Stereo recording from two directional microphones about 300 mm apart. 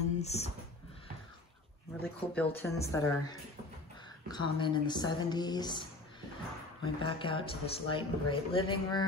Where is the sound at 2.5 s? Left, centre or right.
Centre.